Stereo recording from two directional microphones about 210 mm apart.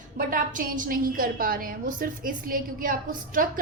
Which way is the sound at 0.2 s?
40° right (ahead or behind).